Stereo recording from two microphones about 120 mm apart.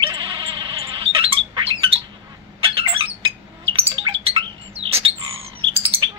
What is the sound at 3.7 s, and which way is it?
Bird, 50° right (ahead or behind).